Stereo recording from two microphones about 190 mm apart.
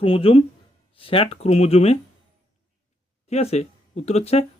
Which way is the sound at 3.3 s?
35° left (ahead or behind).